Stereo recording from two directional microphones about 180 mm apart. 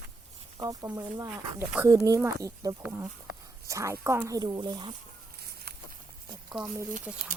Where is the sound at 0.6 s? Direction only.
20° right (ahead or behind).